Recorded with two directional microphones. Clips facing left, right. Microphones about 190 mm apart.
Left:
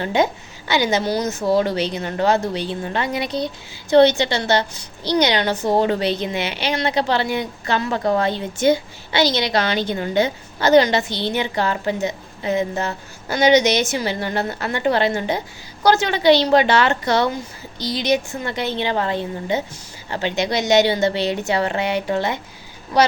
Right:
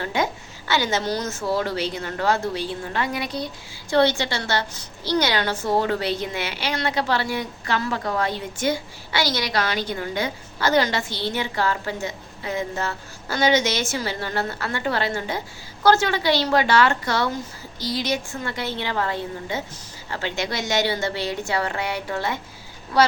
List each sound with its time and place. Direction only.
0.0 s a woman's voice: 20° left (ahead or behind)